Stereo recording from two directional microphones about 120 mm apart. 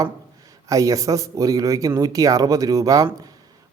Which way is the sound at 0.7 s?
30° right (ahead or behind).